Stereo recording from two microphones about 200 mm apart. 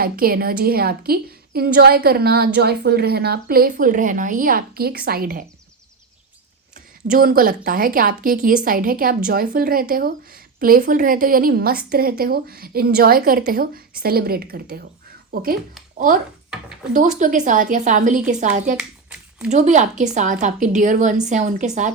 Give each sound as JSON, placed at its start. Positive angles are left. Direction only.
{"t": 0.0, "sound": "a woman's voice", "side_deg": -45}
{"t": 7.1, "sound": "a woman's voice", "side_deg": -45}
{"t": 16.5, "sound": "speech", "side_deg": -5}
{"t": 16.9, "sound": "a woman's voice", "side_deg": -40}
{"t": 18.8, "sound": "hands", "side_deg": -5}
{"t": 19.5, "sound": "a woman's voice", "side_deg": -35}